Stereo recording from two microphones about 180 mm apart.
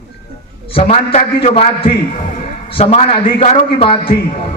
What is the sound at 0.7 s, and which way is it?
A man's voice, 35° left (ahead or behind).